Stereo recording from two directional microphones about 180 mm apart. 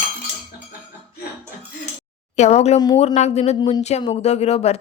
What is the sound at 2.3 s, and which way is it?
Speech, 40° left (ahead or behind).